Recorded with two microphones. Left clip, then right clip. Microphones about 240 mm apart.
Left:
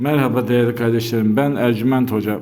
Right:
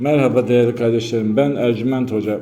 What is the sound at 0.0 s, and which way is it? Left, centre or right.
A man's voice, centre.